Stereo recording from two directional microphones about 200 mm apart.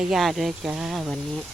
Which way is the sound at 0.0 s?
Centre (ahead or behind).